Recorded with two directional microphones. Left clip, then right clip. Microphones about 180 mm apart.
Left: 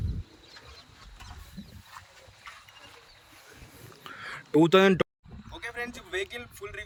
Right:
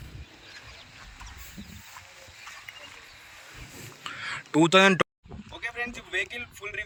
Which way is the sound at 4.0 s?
20° left (ahead or behind).